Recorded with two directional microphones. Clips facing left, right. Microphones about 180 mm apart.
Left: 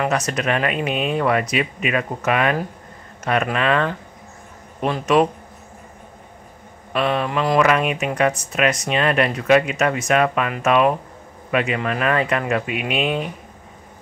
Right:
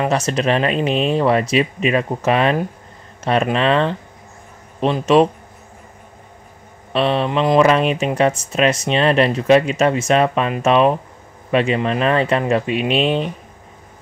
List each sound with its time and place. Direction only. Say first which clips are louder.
0.0 s speech: right 3 dB; 25° right (ahead or behind)
6.9 s speech: right 3 dB; 25° right (ahead or behind)